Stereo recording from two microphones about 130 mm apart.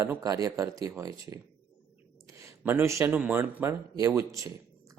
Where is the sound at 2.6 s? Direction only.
20° right (ahead or behind).